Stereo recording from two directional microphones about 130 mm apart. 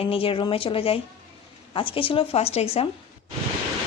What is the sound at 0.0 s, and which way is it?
Speech, 45° left (ahead or behind).